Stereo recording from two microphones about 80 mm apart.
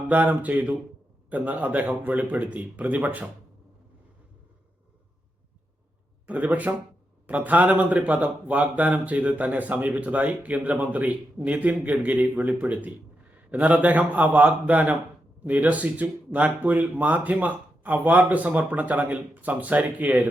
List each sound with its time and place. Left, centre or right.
0.1 s speech: centre
6.2 s speech: centre